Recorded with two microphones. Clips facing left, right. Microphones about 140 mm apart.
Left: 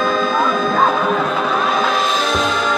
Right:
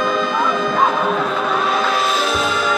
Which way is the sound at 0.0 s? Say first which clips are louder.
Left 2 dB; 15° right (ahead or behind).